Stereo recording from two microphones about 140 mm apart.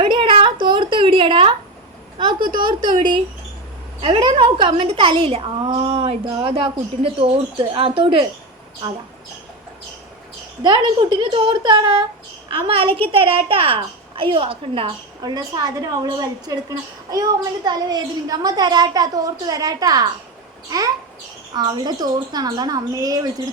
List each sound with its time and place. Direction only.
0.0 s a sound: 35° right (ahead or behind)
2.1 s a woman's voice: 30° right (ahead or behind)
4.0 s a child's voice: 40° right (ahead or behind)
10.6 s a child's voice: 35° right (ahead or behind)